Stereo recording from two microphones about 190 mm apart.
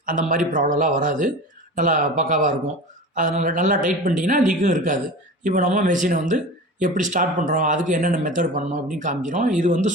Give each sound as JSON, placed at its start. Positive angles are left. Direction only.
{"t": 0.0, "sound": "a man's voice", "side_deg": -45}